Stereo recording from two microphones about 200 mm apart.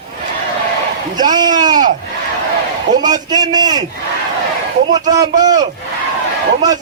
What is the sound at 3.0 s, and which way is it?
Speech, 20° right (ahead or behind).